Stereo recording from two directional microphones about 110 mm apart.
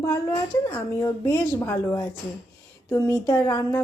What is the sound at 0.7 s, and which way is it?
A woman's voice, 30° left (ahead or behind).